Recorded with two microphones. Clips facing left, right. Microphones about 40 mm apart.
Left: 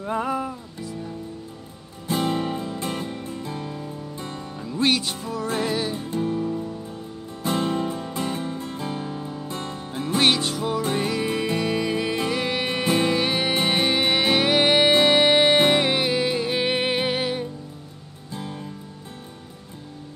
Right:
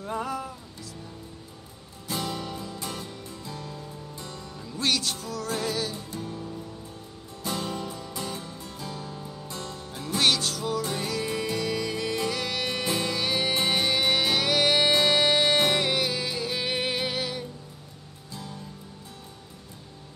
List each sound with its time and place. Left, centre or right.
0.0 s music: left
2.0 s music: left